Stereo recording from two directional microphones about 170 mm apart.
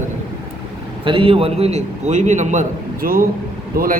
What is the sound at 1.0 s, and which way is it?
A man's voice, 30° right (ahead or behind).